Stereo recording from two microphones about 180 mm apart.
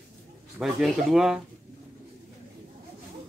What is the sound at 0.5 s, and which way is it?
Speech, 5° right (ahead or behind).